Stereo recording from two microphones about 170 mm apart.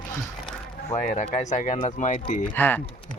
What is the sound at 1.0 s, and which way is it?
Speech, 45° left (ahead or behind).